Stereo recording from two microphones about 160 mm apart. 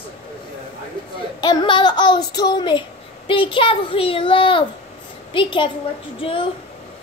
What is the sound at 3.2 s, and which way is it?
Child singing, 35° left (ahead or behind).